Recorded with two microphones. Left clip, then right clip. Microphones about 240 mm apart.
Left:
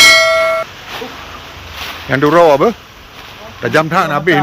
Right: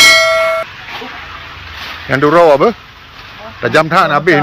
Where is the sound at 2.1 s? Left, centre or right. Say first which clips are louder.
Right 1 dB; centre.